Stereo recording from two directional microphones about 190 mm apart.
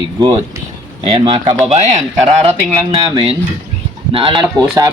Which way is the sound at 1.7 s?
35° right (ahead or behind).